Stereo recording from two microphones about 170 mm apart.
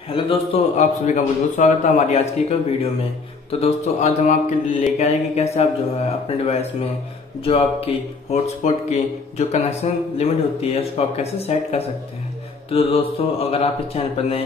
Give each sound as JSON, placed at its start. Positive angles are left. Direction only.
{"t": 0.1, "sound": "speech", "side_deg": 30}
{"t": 0.7, "sound": "a man's voice", "side_deg": 45}